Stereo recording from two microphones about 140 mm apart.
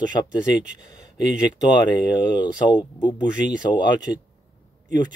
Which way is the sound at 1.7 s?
30° left (ahead or behind).